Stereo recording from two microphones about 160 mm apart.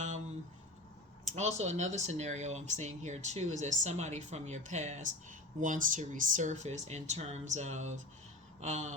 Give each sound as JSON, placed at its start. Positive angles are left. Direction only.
{"t": 1.4, "sound": "speech", "side_deg": -45}